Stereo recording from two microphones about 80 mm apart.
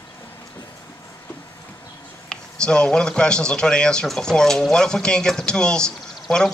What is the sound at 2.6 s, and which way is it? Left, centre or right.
Speech, centre.